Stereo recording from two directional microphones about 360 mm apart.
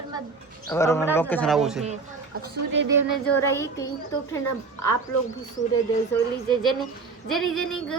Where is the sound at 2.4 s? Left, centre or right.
Right.